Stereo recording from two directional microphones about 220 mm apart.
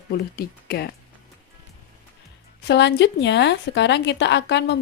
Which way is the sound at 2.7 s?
50° left (ahead or behind).